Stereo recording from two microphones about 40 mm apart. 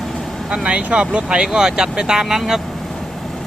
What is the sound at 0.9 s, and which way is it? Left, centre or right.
Speech, right.